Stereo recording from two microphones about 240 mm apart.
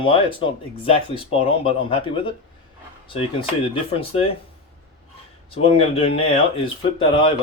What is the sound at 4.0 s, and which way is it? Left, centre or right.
Speech, left.